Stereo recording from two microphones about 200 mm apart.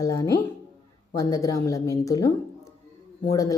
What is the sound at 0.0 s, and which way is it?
A woman's voice, 15° left (ahead or behind).